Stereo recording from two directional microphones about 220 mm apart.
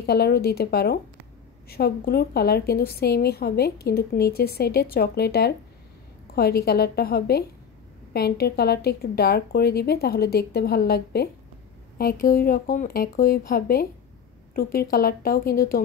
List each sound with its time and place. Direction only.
0.0 s a woman's voice: 45° left (ahead or behind)